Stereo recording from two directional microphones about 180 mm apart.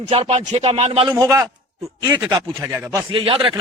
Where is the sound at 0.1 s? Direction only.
30° right (ahead or behind).